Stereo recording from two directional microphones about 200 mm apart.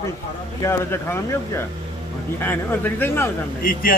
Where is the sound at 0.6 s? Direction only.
15° left (ahead or behind).